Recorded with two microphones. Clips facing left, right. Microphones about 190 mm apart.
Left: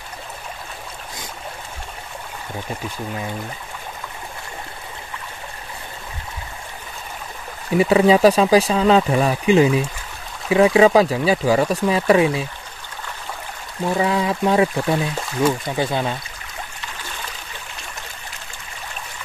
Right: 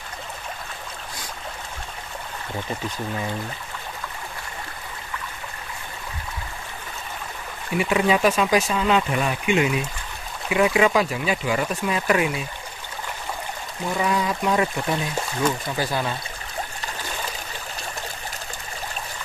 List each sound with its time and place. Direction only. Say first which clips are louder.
7.7 s speech: left 7 dB; 35° left (ahead or behind)
13.9 s speech: left 3 dB; 25° left (ahead or behind)